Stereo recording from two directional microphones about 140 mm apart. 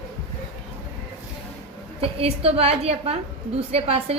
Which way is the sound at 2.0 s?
45° right (ahead or behind).